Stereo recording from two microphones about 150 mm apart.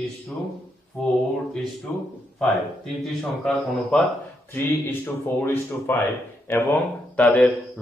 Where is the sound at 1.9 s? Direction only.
10° left (ahead or behind).